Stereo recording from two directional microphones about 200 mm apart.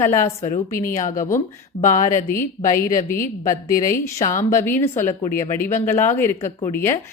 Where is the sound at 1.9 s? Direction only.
40° left (ahead or behind).